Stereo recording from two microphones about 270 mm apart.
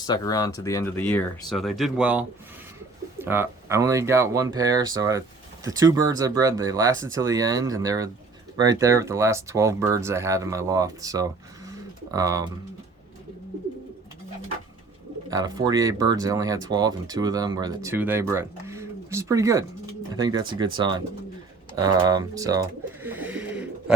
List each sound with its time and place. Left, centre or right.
0.1 s speech: centre
15.3 s speech: centre